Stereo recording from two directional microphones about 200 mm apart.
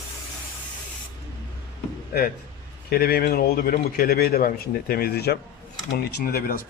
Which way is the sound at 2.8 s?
50° left (ahead or behind).